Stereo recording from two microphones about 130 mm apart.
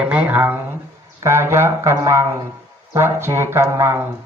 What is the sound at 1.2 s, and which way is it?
Speech, 20° right (ahead or behind).